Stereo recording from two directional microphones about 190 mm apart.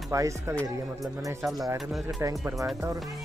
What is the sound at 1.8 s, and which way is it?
Speech, centre (ahead or behind).